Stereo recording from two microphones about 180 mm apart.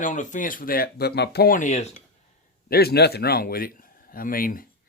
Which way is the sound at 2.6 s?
60° left (ahead or behind).